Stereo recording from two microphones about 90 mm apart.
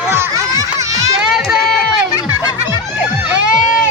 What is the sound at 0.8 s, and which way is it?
Children playing, 40° right (ahead or behind).